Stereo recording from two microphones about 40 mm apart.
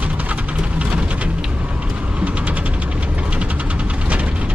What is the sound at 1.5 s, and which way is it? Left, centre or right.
Vehicle, right.